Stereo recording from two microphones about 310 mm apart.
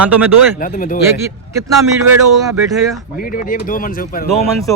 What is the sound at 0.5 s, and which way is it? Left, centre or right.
Speech, left.